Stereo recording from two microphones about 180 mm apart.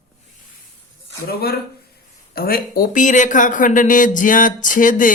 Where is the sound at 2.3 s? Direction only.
55° left (ahead or behind).